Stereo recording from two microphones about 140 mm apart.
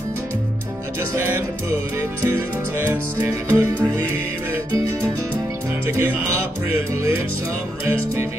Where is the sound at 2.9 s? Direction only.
20° right (ahead or behind).